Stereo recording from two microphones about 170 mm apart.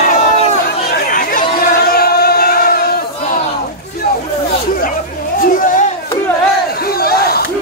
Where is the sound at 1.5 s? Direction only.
65° left (ahead or behind).